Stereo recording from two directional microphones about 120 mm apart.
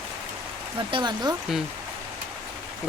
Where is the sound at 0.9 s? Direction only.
35° right (ahead or behind).